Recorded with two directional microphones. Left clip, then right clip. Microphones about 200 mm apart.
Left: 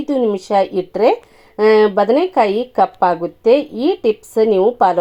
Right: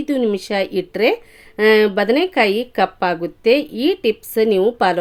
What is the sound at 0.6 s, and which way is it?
Speech, 20° right (ahead or behind).